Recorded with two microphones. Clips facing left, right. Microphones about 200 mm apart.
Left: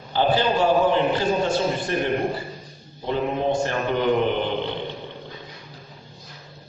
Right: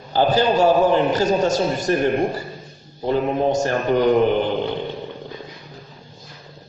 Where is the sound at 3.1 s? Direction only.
40° right (ahead or behind).